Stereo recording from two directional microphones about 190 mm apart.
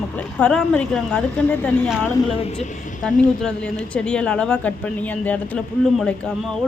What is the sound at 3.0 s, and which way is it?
A woman's voice, 5° left (ahead or behind).